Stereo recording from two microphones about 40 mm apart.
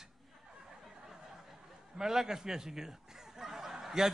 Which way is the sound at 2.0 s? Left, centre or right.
Centre.